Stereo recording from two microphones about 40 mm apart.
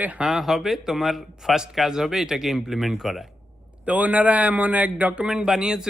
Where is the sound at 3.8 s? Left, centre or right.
Right.